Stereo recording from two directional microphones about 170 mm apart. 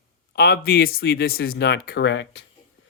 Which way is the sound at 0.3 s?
65° left (ahead or behind).